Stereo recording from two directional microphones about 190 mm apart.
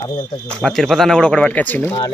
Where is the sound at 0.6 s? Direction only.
Centre (ahead or behind).